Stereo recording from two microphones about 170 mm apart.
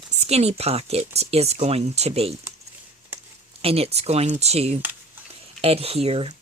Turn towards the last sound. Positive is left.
turn(degrees=-35)  # may be behind; listen again after turning